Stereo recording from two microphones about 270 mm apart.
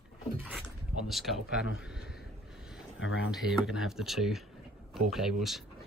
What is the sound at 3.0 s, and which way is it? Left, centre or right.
Speech, left.